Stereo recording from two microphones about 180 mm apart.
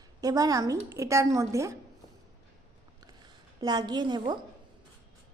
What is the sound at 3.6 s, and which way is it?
Speech, 20° right (ahead or behind).